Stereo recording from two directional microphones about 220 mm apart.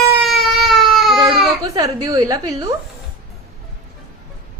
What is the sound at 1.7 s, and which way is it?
Speech, 15° right (ahead or behind).